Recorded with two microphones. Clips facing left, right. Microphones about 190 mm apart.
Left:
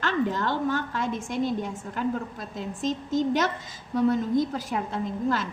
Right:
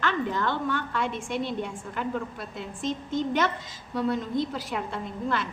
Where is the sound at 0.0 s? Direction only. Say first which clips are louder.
Left 1 dB; 40° left (ahead or behind).